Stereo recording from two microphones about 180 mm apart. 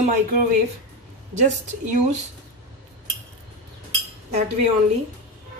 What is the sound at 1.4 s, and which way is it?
Speech, 40° right (ahead or behind).